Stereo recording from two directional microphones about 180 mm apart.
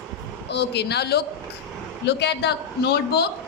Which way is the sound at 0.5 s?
70° left (ahead or behind).